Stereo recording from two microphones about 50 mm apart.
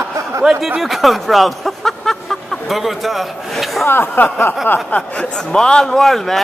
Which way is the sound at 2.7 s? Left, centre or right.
Centre.